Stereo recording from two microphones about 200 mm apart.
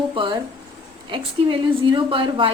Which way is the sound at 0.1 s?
25° right (ahead or behind).